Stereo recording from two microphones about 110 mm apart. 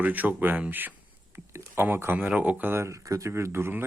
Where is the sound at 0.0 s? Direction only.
15° right (ahead or behind).